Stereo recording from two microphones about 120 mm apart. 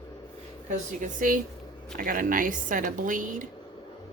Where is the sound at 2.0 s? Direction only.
90° right.